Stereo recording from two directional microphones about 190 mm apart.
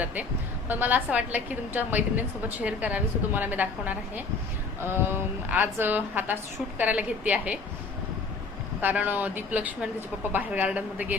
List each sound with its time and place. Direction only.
0.0 s a woman's voice: 10° right (ahead or behind)
8.8 s a woman's voice: 10° right (ahead or behind)